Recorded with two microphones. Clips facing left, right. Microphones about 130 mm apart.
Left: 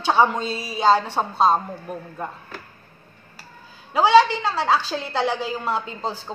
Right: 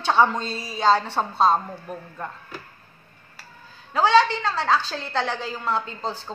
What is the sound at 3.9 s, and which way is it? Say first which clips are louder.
A woman's voice: left 3 dB; 10° left (ahead or behind).